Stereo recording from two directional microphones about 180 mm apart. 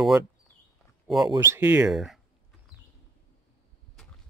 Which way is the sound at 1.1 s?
15° right (ahead or behind).